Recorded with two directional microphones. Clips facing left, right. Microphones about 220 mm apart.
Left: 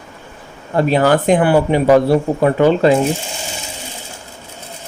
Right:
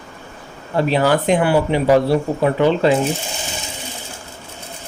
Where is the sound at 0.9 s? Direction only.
50° left (ahead or behind).